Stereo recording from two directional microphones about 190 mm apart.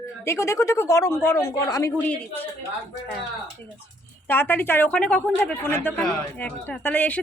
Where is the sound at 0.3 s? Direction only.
15° left (ahead or behind).